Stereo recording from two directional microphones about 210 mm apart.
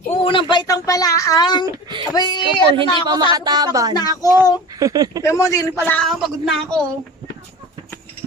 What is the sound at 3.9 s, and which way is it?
Speech, 15° left (ahead or behind).